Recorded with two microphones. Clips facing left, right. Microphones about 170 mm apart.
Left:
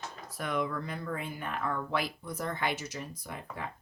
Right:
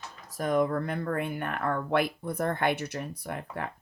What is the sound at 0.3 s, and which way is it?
Speech, 45° right (ahead or behind).